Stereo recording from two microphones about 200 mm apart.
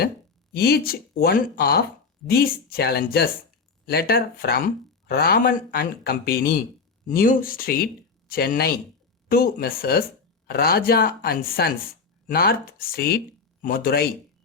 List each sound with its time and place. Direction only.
0.5 s speech: 50° left (ahead or behind)